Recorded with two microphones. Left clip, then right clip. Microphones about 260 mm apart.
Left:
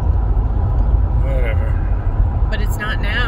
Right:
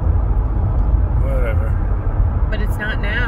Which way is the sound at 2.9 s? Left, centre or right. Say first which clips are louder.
Left 1 dB; centre.